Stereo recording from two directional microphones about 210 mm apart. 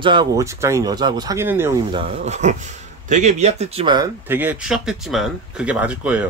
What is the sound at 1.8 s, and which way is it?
Speech, 25° right (ahead or behind).